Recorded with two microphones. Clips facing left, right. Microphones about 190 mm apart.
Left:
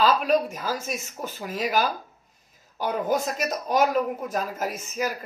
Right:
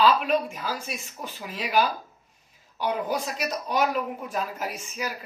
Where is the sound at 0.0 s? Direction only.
40° left (ahead or behind).